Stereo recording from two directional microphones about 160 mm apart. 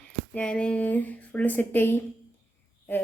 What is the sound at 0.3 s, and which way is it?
Speech, 5° left (ahead or behind).